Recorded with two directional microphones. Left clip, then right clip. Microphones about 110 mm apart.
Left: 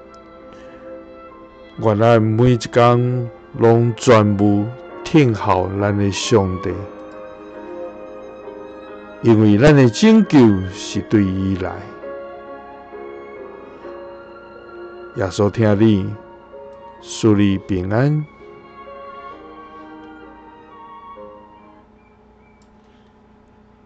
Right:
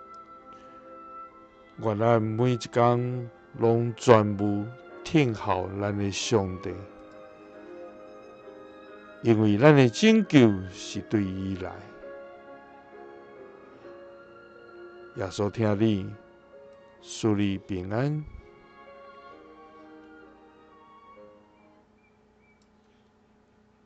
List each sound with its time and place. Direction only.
0.5 s music: 5° right (ahead or behind)
1.8 s speech: 5° right (ahead or behind)
7.3 s music: 10° right (ahead or behind)
7.9 s music: 25° right (ahead or behind)
8.5 s music: 5° right (ahead or behind)
13.7 s music: 5° right (ahead or behind)
14.8 s speech: 5° right (ahead or behind)